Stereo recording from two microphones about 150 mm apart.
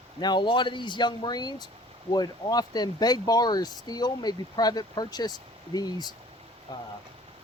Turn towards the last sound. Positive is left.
turn(degrees=25)  # may be behind; listen again after turning